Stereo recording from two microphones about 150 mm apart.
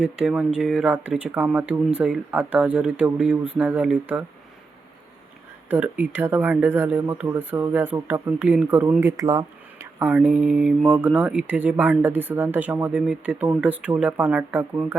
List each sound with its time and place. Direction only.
0.0 s speech: 5° right (ahead or behind)
5.6 s speech: 15° right (ahead or behind)